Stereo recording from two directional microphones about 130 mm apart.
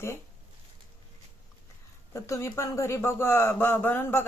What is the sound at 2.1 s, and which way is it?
A woman's voice, 25° left (ahead or behind).